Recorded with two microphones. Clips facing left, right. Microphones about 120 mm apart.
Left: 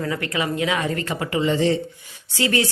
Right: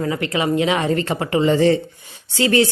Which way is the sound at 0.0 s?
25° right (ahead or behind).